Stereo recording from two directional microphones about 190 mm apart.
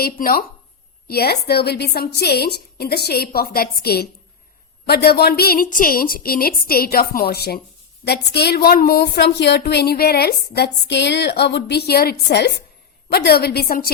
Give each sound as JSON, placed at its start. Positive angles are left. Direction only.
{"t": 0.0, "sound": "a woman's voice", "side_deg": 50}